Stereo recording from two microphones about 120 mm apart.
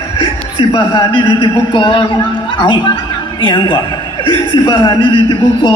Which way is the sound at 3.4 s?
40° left (ahead or behind).